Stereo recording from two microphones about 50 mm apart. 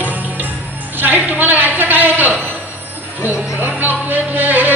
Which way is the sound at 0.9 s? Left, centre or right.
Right.